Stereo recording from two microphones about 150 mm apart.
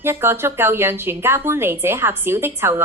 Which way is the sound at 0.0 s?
15° right (ahead or behind).